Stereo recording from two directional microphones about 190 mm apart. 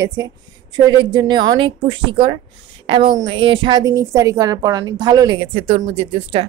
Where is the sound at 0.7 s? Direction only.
20° right (ahead or behind).